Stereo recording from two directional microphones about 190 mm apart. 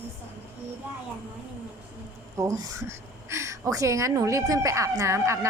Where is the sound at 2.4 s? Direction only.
15° right (ahead or behind).